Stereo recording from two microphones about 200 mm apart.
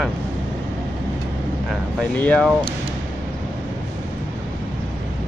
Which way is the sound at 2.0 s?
5° left (ahead or behind).